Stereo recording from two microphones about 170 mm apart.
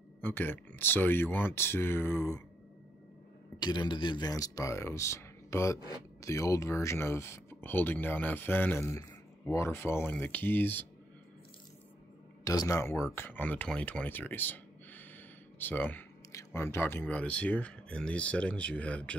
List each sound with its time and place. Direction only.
0.2 s speech: 10° left (ahead or behind)
3.5 s speech: 25° left (ahead or behind)
12.4 s speech: 20° left (ahead or behind)